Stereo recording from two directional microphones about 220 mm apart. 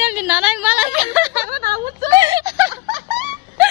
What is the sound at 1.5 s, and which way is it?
Speech, 45° right (ahead or behind).